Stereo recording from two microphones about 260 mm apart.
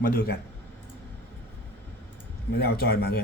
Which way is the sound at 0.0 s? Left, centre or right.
Left.